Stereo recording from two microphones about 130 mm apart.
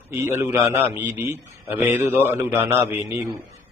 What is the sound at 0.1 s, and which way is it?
A man's voice, 20° right (ahead or behind).